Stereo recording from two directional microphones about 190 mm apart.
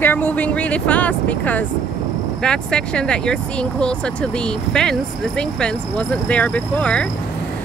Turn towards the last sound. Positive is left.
turn(degrees=5)  # may be behind; listen again after turning